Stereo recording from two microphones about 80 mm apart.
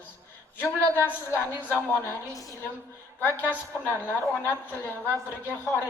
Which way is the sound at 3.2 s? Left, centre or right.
Left.